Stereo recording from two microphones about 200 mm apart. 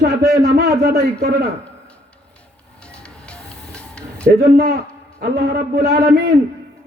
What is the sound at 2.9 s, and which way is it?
Music, 5° left (ahead or behind).